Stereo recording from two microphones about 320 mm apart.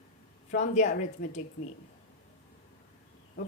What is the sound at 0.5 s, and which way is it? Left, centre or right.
Speech, left.